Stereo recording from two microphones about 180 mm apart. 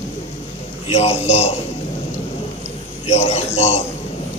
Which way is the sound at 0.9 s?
35° left (ahead or behind).